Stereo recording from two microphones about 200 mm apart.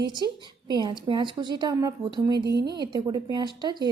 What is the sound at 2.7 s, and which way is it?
Speech, 20° right (ahead or behind).